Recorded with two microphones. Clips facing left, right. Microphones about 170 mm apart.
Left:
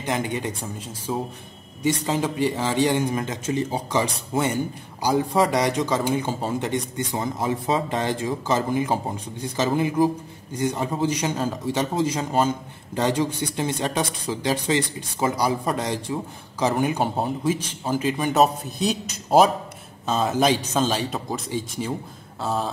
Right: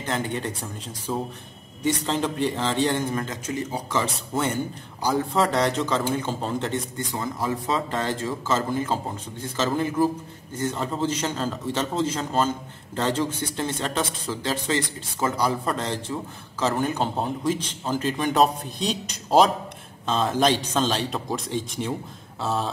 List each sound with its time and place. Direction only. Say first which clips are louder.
0.0 s a man's voice: left 2 dB; 15° left (ahead or behind)
3.4 s speech: left 4 dB; 25° left (ahead or behind)
3.9 s a man's voice: left 2 dB; 15° left (ahead or behind)